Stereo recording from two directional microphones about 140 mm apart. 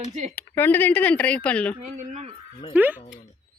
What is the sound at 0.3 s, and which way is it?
Speech, 15° left (ahead or behind).